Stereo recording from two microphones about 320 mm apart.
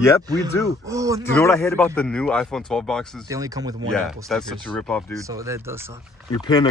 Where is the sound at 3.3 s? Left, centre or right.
Centre.